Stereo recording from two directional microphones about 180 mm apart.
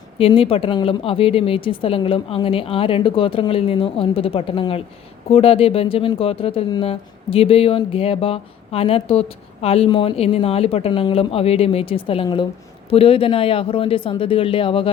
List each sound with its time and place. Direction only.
0.2 s speech: 30° left (ahead or behind)